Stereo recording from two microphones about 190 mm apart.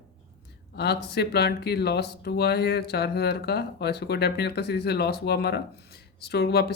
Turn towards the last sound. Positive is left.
turn(degrees=60)  # may be behind; listen again after turning